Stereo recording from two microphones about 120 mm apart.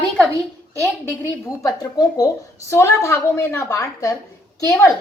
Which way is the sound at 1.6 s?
30° left (ahead or behind).